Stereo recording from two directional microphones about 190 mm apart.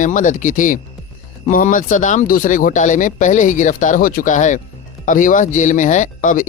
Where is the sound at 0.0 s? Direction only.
45° left (ahead or behind).